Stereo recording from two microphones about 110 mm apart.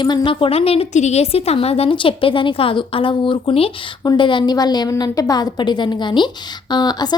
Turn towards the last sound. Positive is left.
turn(degrees=40)  # may be behind; listen again after turning